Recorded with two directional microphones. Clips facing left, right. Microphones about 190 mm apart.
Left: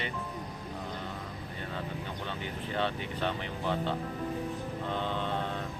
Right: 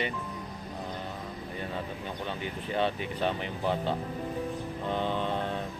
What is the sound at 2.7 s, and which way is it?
Speech, 15° right (ahead or behind).